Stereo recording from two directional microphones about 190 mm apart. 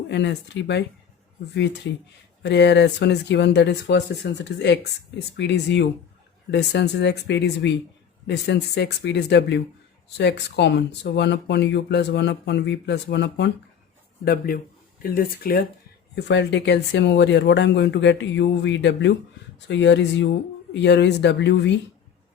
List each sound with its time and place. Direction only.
0.1 s speech: 65° left (ahead or behind)
14.3 s speech: 50° left (ahead or behind)
16.1 s speech: 65° left (ahead or behind)